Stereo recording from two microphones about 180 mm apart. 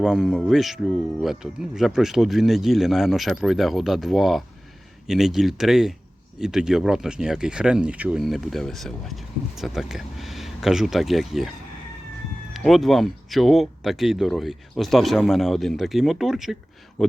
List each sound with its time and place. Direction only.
0.0 s speech: centre (ahead or behind)
12.5 s speech: centre (ahead or behind)